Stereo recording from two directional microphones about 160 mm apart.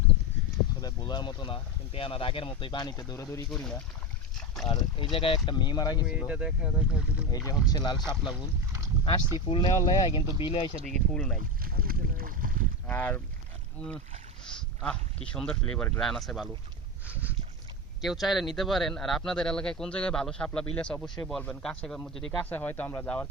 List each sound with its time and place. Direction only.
0.8 s speech: 25° left (ahead or behind)
3.5 s speech: 5° left (ahead or behind)
4.7 s speech: 30° left (ahead or behind)
6.1 s speech: 5° right (ahead or behind)
7.3 s speech: 20° left (ahead or behind)
9.5 s speech: 30° left (ahead or behind)
10.9 s speech: 5° left (ahead or behind)
11.6 s speech: 65° right (ahead or behind)
12.9 s speech: 15° left (ahead or behind)
17.1 s a sound: 10° right (ahead or behind)
18.0 s speech: centre (ahead or behind)